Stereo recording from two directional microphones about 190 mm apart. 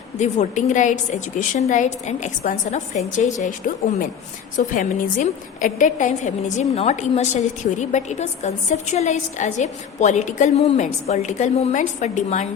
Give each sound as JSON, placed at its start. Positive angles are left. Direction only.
{"t": 0.2, "sound": "a woman's voice", "side_deg": 40}
{"t": 4.5, "sound": "a woman's voice", "side_deg": 45}